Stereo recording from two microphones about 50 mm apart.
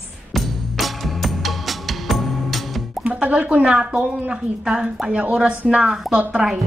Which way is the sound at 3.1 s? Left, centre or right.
Right.